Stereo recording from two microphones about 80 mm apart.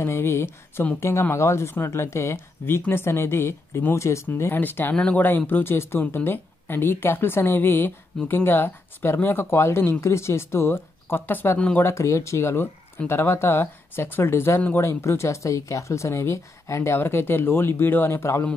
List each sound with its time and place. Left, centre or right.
0.0 s speech: left
4.9 s speech: centre
5.5 s speech: left
11.8 s speech: left